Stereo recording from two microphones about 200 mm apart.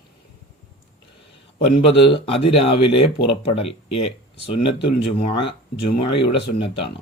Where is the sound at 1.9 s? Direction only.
30° left (ahead or behind).